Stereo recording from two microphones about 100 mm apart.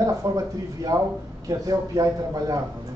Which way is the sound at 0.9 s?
40° right (ahead or behind).